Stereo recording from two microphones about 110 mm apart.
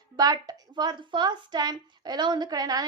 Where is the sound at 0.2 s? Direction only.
35° right (ahead or behind).